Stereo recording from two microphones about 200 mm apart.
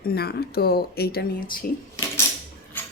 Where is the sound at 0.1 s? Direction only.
50° left (ahead or behind).